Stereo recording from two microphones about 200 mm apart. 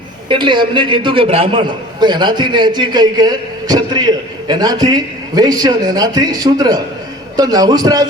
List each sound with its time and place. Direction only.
0.3 s a man's voice: 25° right (ahead or behind)